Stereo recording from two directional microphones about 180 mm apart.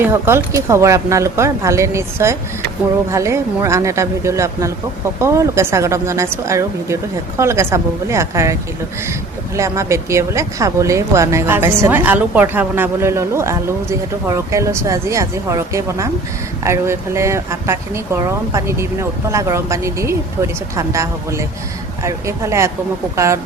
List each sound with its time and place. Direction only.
0.0 s speech: 15° right (ahead or behind)
9.6 s speech: 15° right (ahead or behind)